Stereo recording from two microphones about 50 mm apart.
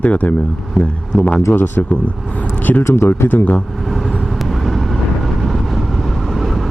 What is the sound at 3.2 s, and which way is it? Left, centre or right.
Speech, left.